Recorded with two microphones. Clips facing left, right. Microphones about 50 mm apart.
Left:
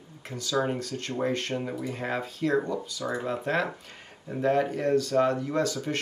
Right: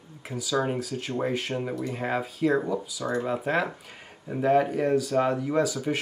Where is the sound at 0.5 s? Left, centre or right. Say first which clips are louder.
Right 1 dB; centre.